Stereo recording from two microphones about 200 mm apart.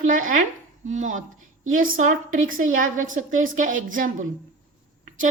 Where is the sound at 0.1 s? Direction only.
40° right (ahead or behind).